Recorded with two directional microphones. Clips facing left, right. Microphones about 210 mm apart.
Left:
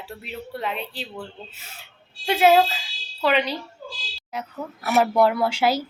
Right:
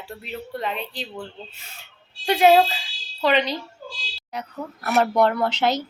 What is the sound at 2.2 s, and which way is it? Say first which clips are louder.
A woman's voice: right 1 dB; centre (ahead or behind).